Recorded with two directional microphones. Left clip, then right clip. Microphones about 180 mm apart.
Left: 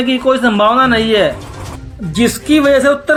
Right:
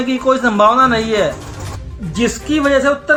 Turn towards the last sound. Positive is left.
turn(degrees=30)  # may be behind; listen again after turning